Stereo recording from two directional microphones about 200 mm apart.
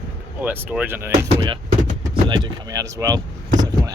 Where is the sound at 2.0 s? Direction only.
20° right (ahead or behind).